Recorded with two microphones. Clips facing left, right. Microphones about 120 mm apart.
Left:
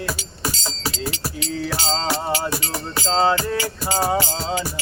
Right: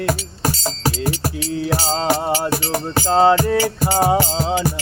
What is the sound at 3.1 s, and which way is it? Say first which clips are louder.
Music: right 5 dB; 10° right (ahead or behind).